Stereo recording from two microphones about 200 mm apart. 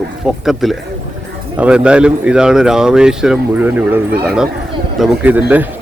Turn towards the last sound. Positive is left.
turn(degrees=-10)  # may be behind; listen again after turning